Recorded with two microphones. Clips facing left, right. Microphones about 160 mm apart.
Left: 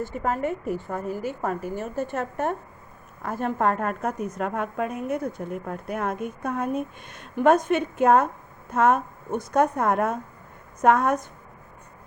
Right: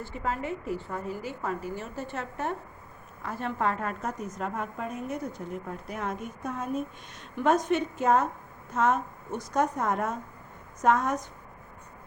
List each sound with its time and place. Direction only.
0.0 s a woman's voice: 50° left (ahead or behind)
4.4 s a woman's voice: 65° left (ahead or behind)